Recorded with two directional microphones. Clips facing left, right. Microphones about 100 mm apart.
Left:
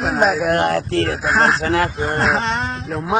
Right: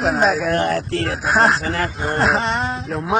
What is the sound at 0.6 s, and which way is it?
Speech, 75° left (ahead or behind).